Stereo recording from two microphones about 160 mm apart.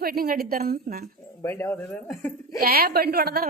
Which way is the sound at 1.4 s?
15° left (ahead or behind).